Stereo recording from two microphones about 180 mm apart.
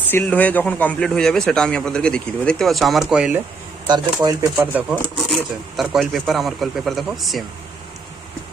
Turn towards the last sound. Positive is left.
turn(degrees=0)  # may be behind; listen again after turning